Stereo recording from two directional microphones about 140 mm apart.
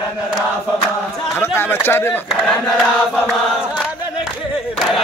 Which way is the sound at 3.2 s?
10° right (ahead or behind).